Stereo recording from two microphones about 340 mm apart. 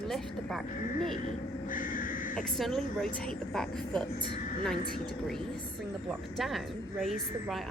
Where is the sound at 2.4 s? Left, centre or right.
Centre.